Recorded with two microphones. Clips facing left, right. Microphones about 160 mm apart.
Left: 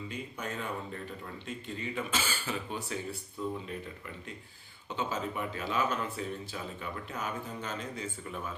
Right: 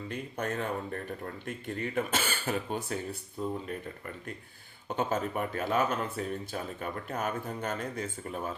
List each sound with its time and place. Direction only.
0.1 s speech: 55° right (ahead or behind)
4.9 s speech: 50° right (ahead or behind)